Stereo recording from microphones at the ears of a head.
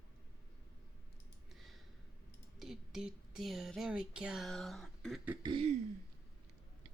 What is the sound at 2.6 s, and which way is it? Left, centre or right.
Speech, centre.